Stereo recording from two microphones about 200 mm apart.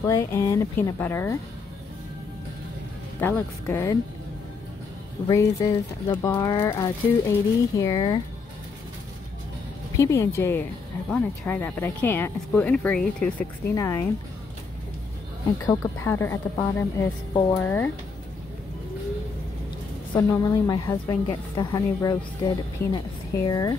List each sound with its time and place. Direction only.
0.0 s speech: 15° left (ahead or behind)
3.2 s speech: 10° left (ahead or behind)
5.3 s speech: 15° left (ahead or behind)
9.9 s speech: 15° left (ahead or behind)
15.6 s speech: 15° left (ahead or behind)
20.2 s speech: 15° left (ahead or behind)